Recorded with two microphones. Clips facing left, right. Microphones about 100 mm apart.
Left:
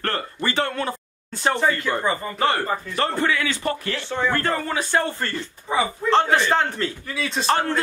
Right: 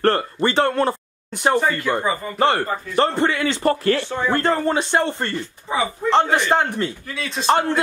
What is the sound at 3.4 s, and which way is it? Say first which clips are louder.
Speech: right 7 dB; 40° right (ahead or behind).